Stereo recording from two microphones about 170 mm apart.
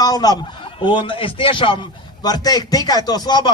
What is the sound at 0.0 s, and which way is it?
A man's voice, 20° left (ahead or behind).